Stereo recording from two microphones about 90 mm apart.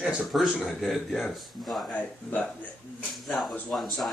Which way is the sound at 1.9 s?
15° left (ahead or behind).